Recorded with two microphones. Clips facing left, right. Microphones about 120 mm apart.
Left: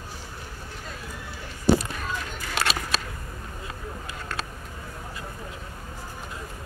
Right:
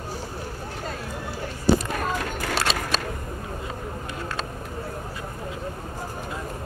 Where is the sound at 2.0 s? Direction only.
60° right (ahead or behind).